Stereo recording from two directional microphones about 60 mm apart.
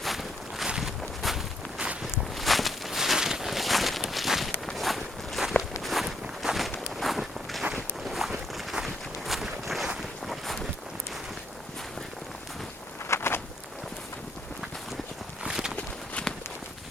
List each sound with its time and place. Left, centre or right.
0.0 s a sound: centre
0.8 s walk: centre
10.0 s boat: centre
13.1 s walk: left
15.4 s clip-clop: centre